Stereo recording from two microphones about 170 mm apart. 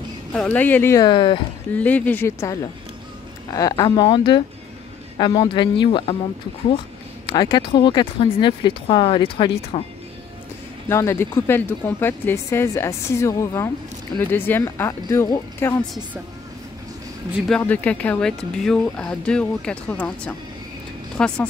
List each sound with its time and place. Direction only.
0.3 s speech: 10° left (ahead or behind)
1.0 s speech: 30° left (ahead or behind)
1.7 s speech: 10° left (ahead or behind)
3.5 s speech: 20° left (ahead or behind)
7.2 s speech: 25° left (ahead or behind)
10.9 s speech: 15° left (ahead or behind)
17.5 s a woman's voice: 10° left (ahead or behind)